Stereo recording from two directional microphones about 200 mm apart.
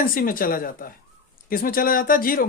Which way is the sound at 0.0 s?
45° left (ahead or behind).